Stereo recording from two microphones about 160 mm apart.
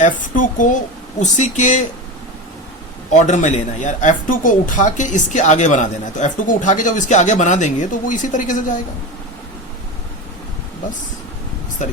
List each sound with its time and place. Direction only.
0.0 s a woman's voice: 55° left (ahead or behind)
3.1 s a woman's voice: 50° left (ahead or behind)